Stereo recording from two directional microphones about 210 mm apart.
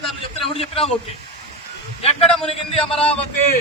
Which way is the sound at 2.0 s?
30° left (ahead or behind).